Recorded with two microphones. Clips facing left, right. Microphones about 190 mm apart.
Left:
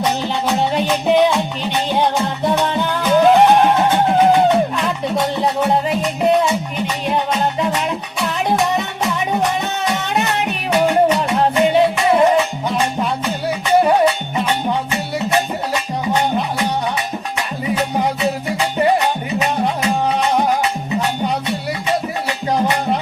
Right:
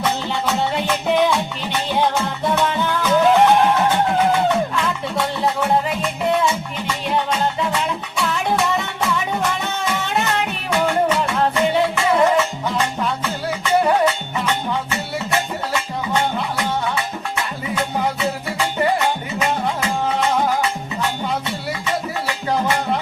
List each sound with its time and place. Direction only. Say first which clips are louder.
0.0 s music: left 3 dB; 20° left (ahead or behind)
17.3 s music: left 4 dB; 20° left (ahead or behind)